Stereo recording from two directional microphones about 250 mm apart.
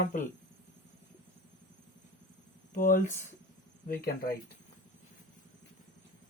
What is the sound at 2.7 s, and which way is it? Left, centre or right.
Speech, left.